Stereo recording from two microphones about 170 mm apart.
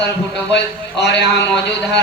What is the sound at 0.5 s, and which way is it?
Speech, 90° left.